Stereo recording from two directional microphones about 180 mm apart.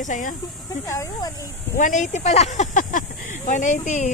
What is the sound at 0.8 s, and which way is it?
Speech, 15° left (ahead or behind).